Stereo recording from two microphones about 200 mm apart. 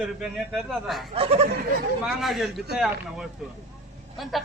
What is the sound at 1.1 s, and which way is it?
Speech, 30° right (ahead or behind).